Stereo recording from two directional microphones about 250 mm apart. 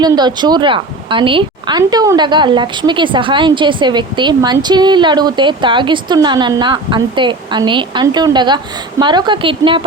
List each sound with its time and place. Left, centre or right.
0.0 s a woman's voice: centre